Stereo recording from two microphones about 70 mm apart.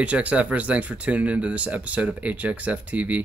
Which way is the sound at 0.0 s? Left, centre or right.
Centre.